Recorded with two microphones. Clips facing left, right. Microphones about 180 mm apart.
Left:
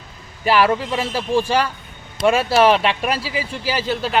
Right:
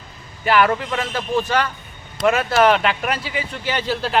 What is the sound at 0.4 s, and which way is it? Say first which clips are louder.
Speech: left 1 dB; 30° left (ahead or behind).